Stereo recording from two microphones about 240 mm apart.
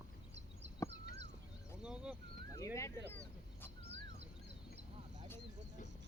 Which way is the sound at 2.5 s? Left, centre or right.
Centre.